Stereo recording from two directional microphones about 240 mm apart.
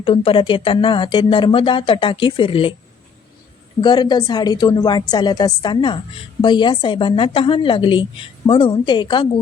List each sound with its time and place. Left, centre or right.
0.0 s a woman's voice: left
3.8 s a woman's voice: centre